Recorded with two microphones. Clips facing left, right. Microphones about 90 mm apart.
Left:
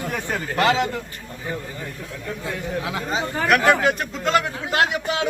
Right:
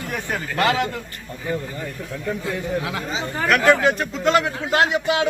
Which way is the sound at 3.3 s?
20° left (ahead or behind).